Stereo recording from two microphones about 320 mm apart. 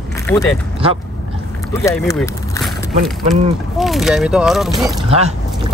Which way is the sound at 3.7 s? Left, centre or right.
Centre.